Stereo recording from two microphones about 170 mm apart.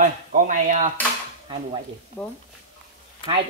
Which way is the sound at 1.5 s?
30° right (ahead or behind).